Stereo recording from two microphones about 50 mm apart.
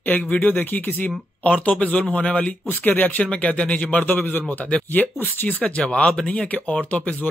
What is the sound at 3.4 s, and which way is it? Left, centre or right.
Speech, left.